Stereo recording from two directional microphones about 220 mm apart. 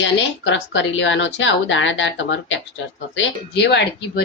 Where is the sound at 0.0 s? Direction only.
55° left (ahead or behind).